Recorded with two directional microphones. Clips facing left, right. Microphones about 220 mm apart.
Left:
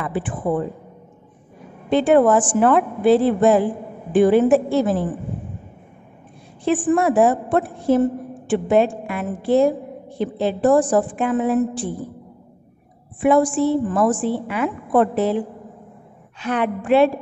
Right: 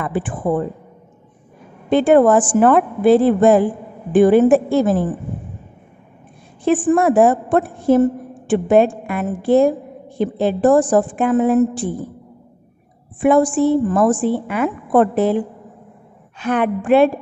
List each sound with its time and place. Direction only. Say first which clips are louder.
0.0 s a sound: right 3 dB; 50° right (ahead or behind)
1.9 s a woman's voice: right 3 dB; 50° right (ahead or behind)
6.6 s a woman's voice: right 3 dB; 50° right (ahead or behind)
13.2 s a woman's voice: right 2 dB; 50° right (ahead or behind)
16.3 s a woman's voice: right 4 dB; 50° right (ahead or behind)